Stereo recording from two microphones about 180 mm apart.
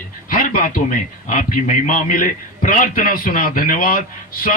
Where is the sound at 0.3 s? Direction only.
50° left (ahead or behind).